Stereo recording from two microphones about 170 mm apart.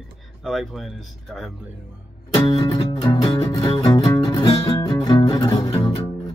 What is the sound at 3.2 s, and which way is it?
Music, 20° left (ahead or behind).